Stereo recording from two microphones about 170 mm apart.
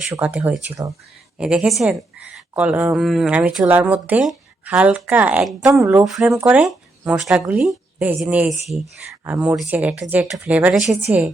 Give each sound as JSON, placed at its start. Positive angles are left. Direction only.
{"t": 0.1, "sound": "speech", "side_deg": -10}
{"t": 5.8, "sound": "speech", "side_deg": -15}
{"t": 6.1, "sound": "speech", "side_deg": 0}